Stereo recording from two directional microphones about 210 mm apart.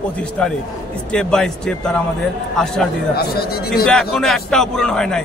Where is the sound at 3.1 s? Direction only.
45° left (ahead or behind).